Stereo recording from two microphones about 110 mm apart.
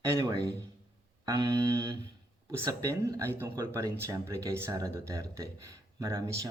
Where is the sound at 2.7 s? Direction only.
30° right (ahead or behind).